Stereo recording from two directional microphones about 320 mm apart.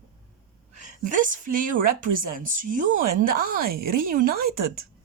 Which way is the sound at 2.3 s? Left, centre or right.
Right.